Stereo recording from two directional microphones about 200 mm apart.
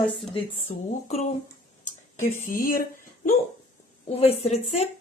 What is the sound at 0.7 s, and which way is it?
Speech, 35° left (ahead or behind).